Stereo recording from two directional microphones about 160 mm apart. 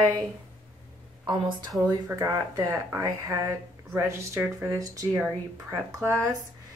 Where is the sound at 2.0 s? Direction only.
20° right (ahead or behind).